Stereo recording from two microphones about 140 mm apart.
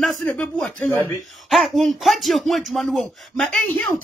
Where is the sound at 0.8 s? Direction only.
20° left (ahead or behind).